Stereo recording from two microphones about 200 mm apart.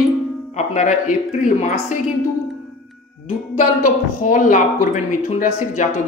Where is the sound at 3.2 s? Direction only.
40° left (ahead or behind).